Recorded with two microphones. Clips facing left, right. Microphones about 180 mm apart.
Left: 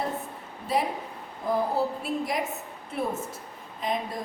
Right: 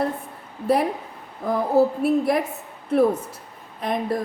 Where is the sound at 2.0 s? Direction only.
60° right (ahead or behind).